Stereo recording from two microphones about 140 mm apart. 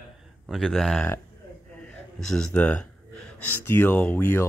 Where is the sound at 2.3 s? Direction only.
10° left (ahead or behind).